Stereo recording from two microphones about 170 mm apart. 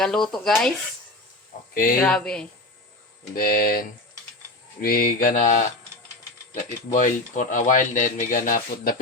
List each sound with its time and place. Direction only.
0.0 s speech: 5° left (ahead or behind)
1.7 s speech: 55° left (ahead or behind)
2.0 s speech: 5° left (ahead or behind)
3.3 s speech: 60° left (ahead or behind)